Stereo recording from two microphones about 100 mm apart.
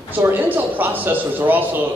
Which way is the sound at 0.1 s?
20° right (ahead or behind).